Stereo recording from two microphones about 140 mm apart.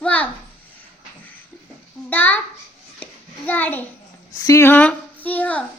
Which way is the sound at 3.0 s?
10° left (ahead or behind).